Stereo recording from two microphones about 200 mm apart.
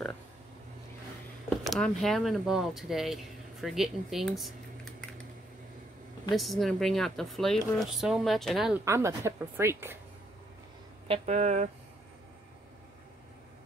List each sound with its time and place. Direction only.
1.6 s speech: centre (ahead or behind)
6.3 s speech: centre (ahead or behind)
8.8 s speech: 15° right (ahead or behind)
11.1 s speech: 35° right (ahead or behind)